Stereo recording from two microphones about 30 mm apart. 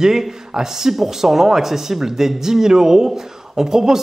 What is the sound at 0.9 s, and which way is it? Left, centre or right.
Speech, centre.